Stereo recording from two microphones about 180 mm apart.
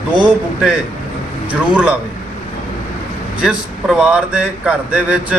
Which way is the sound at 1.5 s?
5° right (ahead or behind).